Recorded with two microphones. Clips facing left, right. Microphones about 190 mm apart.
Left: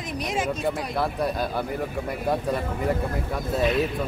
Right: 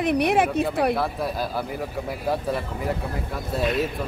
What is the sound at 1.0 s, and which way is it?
Speech, centre (ahead or behind).